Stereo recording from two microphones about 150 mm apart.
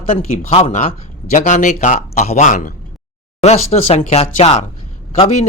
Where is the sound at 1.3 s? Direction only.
60° left (ahead or behind).